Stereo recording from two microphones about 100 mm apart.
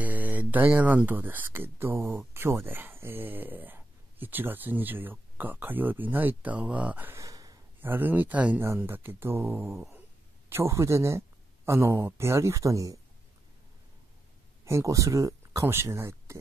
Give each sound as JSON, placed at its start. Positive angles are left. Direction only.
{"t": 0.0, "sound": "speech", "side_deg": -15}
{"t": 7.2, "sound": "a sound", "side_deg": -35}
{"t": 7.8, "sound": "speech", "side_deg": -20}
{"t": 14.6, "sound": "speech", "side_deg": -30}